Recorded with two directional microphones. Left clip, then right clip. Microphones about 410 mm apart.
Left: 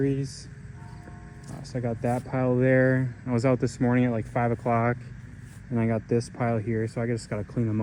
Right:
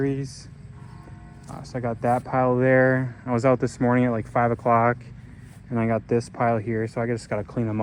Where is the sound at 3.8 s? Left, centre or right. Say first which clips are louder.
Right 4 dB; right.